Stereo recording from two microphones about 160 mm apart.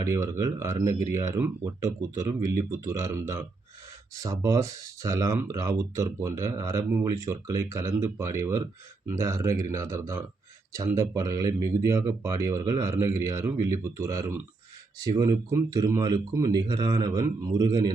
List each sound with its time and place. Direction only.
0.0 s speech: 20° right (ahead or behind)